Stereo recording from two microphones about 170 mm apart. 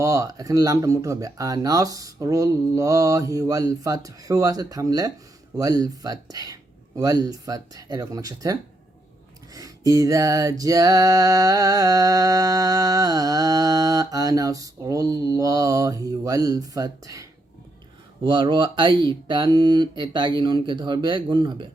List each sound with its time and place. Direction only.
0.0 s music: 20° right (ahead or behind)